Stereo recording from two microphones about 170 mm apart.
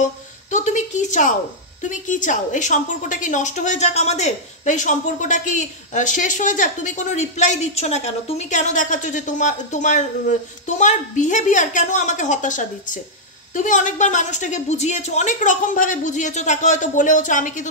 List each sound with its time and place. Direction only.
0.5 s a woman's voice: 45° left (ahead or behind)